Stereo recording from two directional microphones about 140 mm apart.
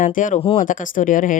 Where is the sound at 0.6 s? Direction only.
70° left (ahead or behind).